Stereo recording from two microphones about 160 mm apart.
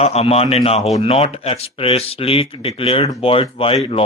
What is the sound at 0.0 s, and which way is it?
Speech, 40° left (ahead or behind).